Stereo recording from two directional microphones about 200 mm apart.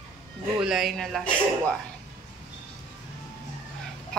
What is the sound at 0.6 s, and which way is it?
Speech, centre (ahead or behind).